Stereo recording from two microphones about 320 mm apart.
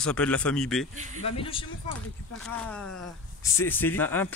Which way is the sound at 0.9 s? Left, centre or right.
Right.